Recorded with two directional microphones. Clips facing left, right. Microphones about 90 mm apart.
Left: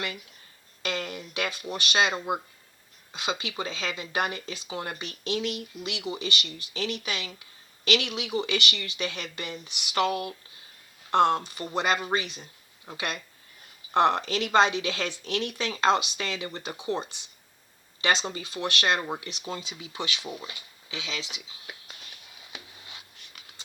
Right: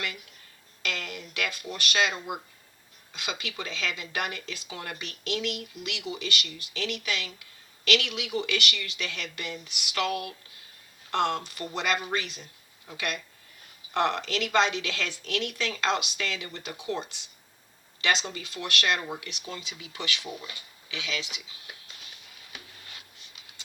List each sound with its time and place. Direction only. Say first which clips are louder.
0.8 s speech: left 3 dB; 35° left (ahead or behind)